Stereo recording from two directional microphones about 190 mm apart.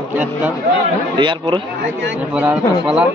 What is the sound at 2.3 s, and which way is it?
Speech, 5° right (ahead or behind).